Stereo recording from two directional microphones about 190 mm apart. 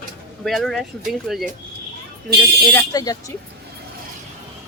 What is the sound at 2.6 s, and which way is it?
Speech, 10° left (ahead or behind).